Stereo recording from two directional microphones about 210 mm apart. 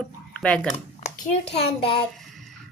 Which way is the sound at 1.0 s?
30° left (ahead or behind).